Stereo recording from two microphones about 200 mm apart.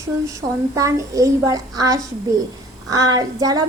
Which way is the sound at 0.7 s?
15° right (ahead or behind).